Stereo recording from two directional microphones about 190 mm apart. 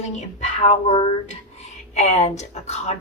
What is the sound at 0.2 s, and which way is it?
A woman's voice, 35° left (ahead or behind).